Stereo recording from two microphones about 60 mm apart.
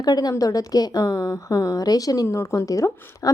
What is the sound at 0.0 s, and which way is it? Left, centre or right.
A woman's voice, left.